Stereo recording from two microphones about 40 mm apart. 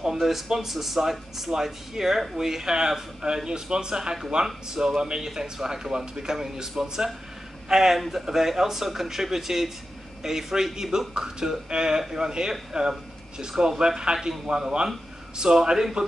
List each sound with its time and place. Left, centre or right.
0.0 s a man's voice: centre